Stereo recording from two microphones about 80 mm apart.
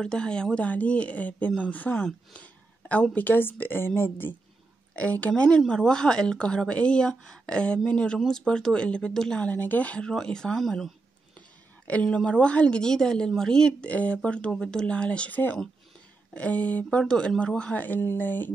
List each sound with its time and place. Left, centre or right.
0.0 s speech: centre; by 4.4 s left
4.9 s speech: centre
11.9 s speech: centre